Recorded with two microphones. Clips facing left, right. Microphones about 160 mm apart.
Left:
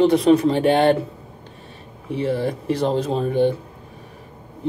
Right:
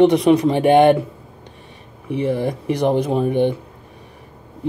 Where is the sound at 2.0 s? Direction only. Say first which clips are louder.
Right 2 dB; 15° right (ahead or behind).